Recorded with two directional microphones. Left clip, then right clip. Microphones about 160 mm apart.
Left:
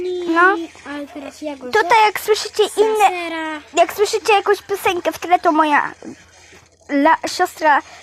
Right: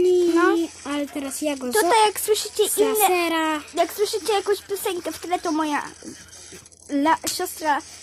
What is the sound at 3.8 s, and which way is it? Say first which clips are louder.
Speech: left 9 dB; 25° left (ahead or behind).